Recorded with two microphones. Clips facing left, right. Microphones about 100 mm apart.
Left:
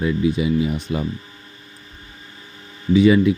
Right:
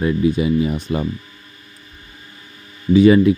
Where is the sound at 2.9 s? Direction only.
45° right (ahead or behind).